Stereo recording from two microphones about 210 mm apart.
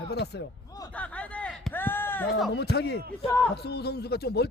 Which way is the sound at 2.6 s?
50° left (ahead or behind).